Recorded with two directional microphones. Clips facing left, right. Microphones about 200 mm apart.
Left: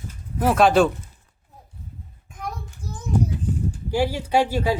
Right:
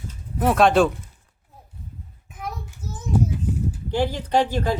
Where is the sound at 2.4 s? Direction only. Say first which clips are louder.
Even; 5° right (ahead or behind).